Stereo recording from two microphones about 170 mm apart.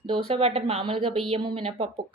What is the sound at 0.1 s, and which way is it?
A woman's voice, 35° right (ahead or behind).